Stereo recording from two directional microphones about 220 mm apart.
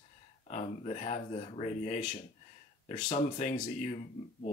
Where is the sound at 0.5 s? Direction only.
30° left (ahead or behind).